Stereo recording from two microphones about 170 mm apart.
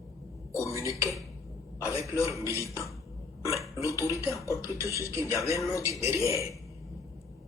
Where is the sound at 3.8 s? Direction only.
20° left (ahead or behind).